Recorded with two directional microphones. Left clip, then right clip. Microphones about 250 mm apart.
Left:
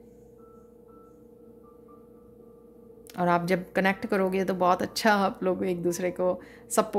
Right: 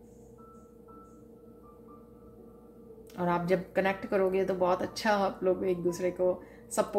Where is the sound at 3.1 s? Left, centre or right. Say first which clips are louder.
Left 4 dB; left.